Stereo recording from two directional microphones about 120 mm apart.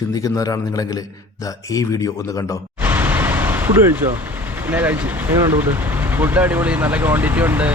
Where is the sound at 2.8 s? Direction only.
15° right (ahead or behind).